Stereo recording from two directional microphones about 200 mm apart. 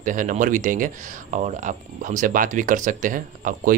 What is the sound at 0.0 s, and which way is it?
Speech, 40° right (ahead or behind).